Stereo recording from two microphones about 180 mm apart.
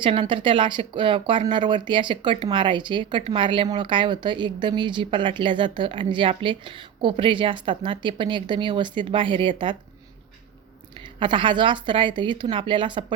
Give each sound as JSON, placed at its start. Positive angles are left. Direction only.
{"t": 0.0, "sound": "speech", "side_deg": -30}
{"t": 11.2, "sound": "speech", "side_deg": -25}